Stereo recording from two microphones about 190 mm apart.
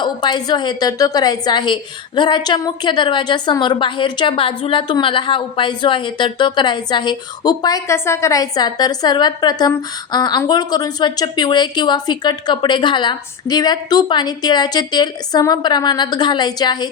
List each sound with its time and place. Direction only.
0.0 s a woman's voice: 25° left (ahead or behind)